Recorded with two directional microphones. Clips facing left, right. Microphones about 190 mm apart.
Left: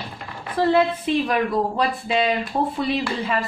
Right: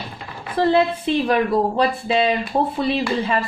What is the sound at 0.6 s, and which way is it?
Speech, 30° right (ahead or behind).